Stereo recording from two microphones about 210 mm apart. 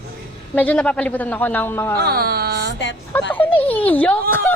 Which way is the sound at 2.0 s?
45° right (ahead or behind).